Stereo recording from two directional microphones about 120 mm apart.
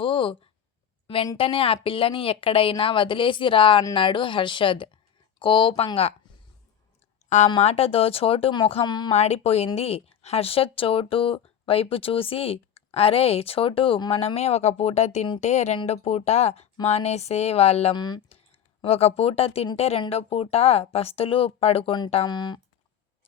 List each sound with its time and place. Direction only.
0.0 s a sound: 45° left (ahead or behind)
1.0 s a woman's voice: 50° left (ahead or behind)
7.3 s a woman's voice: 75° left (ahead or behind)
7.6 s speech: 55° left (ahead or behind); by 9.1 s 40° left (ahead or behind)
9.1 s speech: 65° left (ahead or behind)
15.9 s speech: 60° left (ahead or behind)
17.9 s speech: 35° left (ahead or behind)
18.3 s a sound: 55° left (ahead or behind)
19.7 s speech: 60° left (ahead or behind)
22.3 s speech: 35° left (ahead or behind)